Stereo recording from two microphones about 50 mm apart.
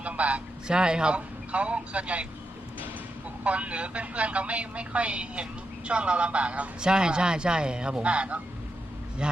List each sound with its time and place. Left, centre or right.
0.0 s a sound: right
0.7 s speech: centre
3.4 s a man's voice: right